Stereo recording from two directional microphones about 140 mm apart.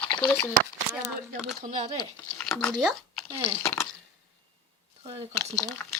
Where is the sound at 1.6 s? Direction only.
55° right (ahead or behind).